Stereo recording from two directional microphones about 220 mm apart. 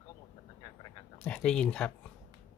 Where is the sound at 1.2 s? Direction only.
5° left (ahead or behind).